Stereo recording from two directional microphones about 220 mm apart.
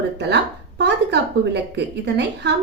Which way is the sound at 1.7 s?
50° right (ahead or behind).